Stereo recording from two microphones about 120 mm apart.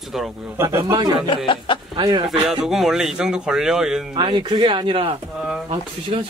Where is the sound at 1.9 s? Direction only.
40° right (ahead or behind).